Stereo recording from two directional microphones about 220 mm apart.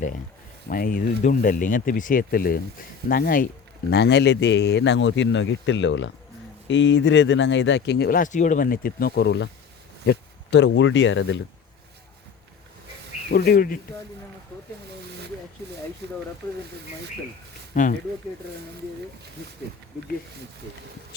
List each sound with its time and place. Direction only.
0.7 s a man's voice: 40° left (ahead or behind); by 11.3 s 60° left (ahead or behind)
13.3 s speech: 40° left (ahead or behind)
16.0 s speech: 50° right (ahead or behind)
17.7 s speech: 35° left (ahead or behind)